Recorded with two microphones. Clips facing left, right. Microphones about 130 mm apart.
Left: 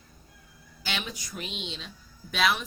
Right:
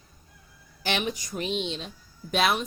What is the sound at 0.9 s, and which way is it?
Speech, 45° right (ahead or behind).